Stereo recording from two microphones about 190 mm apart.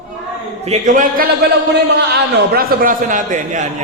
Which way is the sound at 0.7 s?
40° right (ahead or behind).